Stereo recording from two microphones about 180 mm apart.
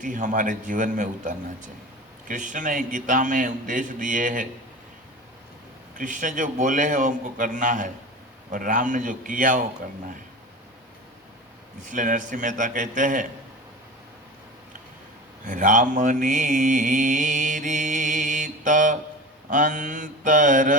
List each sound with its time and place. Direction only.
0.0 s a man's voice: 45° right (ahead or behind)
6.0 s a man's voice: 45° right (ahead or behind)
11.9 s a man's voice: 45° right (ahead or behind)
15.4 s mantra: 45° right (ahead or behind)
19.5 s a man's voice: 45° right (ahead or behind)